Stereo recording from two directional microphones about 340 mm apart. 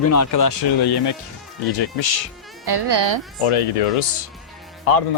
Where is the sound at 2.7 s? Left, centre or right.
Right.